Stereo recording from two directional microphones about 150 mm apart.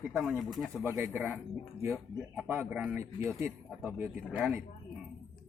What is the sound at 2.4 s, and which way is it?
Speech, 10° right (ahead or behind).